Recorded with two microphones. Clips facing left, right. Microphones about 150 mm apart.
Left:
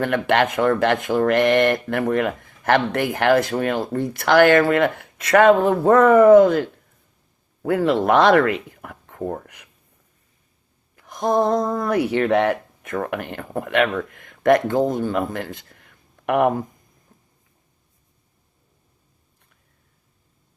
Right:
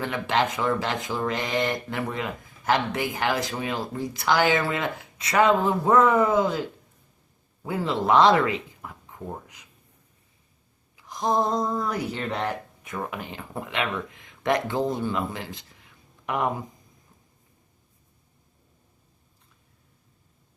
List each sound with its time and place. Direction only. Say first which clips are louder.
0.0 s speech: left 6 dB; 65° left (ahead or behind)
10.9 s speech: left 5 dB; 55° left (ahead or behind)